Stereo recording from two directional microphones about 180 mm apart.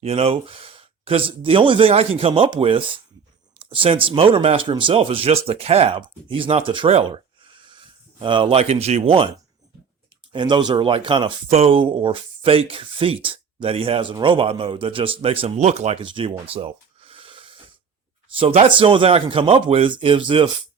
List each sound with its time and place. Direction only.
0.0 s speech: 35° right (ahead or behind)
8.2 s speech: 30° right (ahead or behind)
10.3 s speech: 25° right (ahead or behind)
16.1 s a sound: 30° right (ahead or behind)
18.3 s speech: 35° right (ahead or behind)